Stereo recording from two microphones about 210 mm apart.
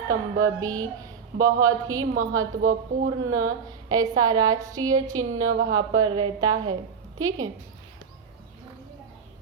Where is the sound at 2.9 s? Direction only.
35° right (ahead or behind).